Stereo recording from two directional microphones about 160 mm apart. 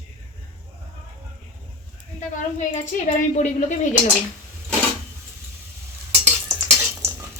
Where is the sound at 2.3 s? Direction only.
50° left (ahead or behind).